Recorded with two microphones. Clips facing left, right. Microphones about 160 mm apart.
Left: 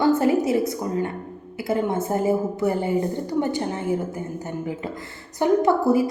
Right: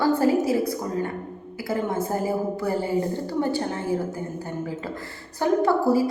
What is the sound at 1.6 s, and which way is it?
A woman's voice, 25° left (ahead or behind).